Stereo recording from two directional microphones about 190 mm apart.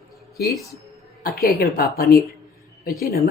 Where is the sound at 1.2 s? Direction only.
55° left (ahead or behind).